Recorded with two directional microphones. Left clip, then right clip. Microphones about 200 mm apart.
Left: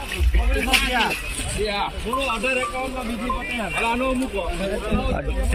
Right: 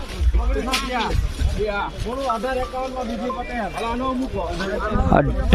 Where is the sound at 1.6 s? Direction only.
15° right (ahead or behind).